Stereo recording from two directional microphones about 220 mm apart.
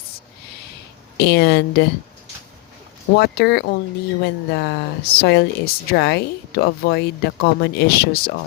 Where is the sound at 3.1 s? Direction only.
45° left (ahead or behind).